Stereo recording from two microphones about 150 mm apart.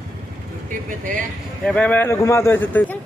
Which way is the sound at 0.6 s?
65° right (ahead or behind).